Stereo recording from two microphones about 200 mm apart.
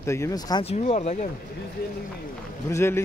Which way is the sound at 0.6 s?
30° left (ahead or behind).